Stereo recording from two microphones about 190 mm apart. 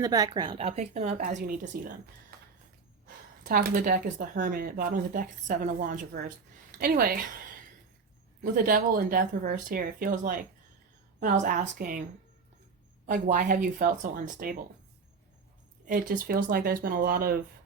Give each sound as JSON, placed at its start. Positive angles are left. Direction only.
{"t": 0.0, "sound": "speech", "side_deg": -20}
{"t": 3.4, "sound": "a woman's voice", "side_deg": -45}
{"t": 8.4, "sound": "speech", "side_deg": -50}
{"t": 13.1, "sound": "speech", "side_deg": -45}
{"t": 15.9, "sound": "speech", "side_deg": -45}